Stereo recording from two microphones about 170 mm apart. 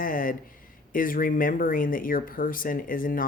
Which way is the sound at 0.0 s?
55° left (ahead or behind).